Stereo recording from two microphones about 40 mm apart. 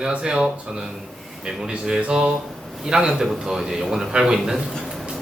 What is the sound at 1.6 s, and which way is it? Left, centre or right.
Speech, centre.